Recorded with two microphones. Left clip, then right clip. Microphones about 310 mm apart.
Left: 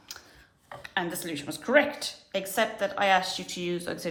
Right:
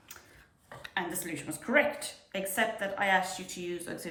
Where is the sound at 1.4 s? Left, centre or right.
Centre.